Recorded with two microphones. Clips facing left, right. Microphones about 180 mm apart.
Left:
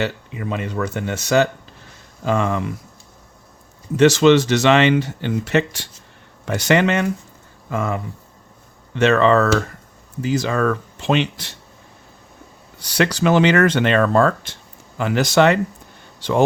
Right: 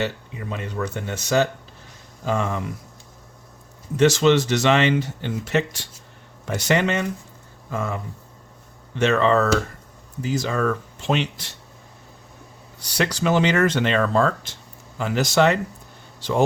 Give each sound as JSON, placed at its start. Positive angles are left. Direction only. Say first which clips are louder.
{"t": 0.0, "sound": "speech", "louder": "left 3 dB", "side_deg": 85}
{"t": 2.2, "sound": "speech", "louder": "left 4 dB", "side_deg": 90}
{"t": 3.9, "sound": "speech", "louder": "left 4 dB", "side_deg": 80}
{"t": 12.9, "sound": "speech", "louder": "left 4 dB", "side_deg": 75}
{"t": 14.9, "sound": "speech", "louder": "left 3 dB", "side_deg": 70}